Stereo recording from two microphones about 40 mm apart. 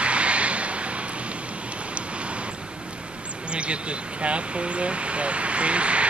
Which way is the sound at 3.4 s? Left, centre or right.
Right.